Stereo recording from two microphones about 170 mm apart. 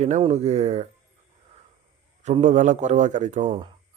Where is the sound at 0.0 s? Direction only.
45° right (ahead or behind).